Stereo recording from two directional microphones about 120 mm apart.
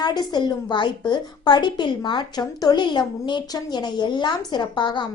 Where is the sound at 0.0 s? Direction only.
35° left (ahead or behind).